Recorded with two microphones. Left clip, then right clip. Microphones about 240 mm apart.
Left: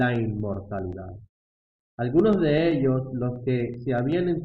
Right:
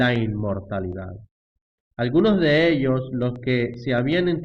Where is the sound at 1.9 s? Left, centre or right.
Right.